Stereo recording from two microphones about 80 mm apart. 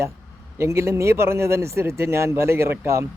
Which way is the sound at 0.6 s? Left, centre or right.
Right.